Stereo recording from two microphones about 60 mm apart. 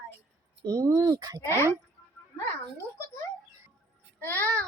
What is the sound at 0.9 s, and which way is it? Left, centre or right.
Speech, right.